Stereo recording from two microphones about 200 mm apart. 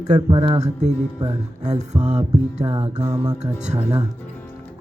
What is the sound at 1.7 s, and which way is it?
Speech, 35° right (ahead or behind).